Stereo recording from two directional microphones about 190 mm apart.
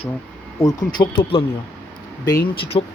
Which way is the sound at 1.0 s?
25° left (ahead or behind).